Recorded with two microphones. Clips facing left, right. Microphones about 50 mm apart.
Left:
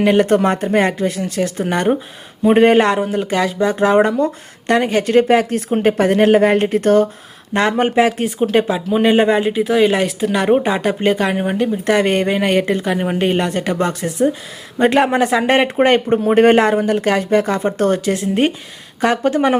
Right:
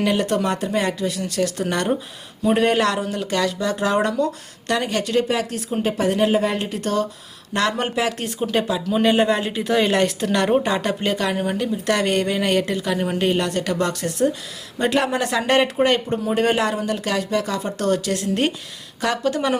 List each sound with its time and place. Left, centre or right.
0.0 s speech: left
7.5 s speech: left
14.8 s speech: left